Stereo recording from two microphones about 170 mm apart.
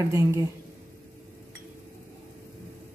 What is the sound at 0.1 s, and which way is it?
Speech, 15° right (ahead or behind).